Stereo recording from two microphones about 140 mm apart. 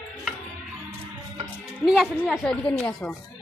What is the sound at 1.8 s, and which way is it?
A woman's voice, 5° right (ahead or behind).